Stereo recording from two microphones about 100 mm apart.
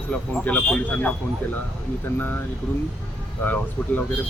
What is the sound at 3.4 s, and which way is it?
Speech, 15° left (ahead or behind).